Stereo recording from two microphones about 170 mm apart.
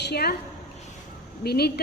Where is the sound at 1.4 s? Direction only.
70° left (ahead or behind).